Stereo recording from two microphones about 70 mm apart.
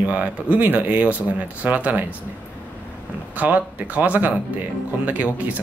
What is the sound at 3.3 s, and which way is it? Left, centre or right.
Speech, right.